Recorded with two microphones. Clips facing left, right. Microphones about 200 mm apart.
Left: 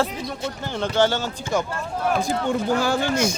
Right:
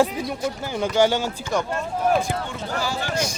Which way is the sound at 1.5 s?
Centre (ahead or behind).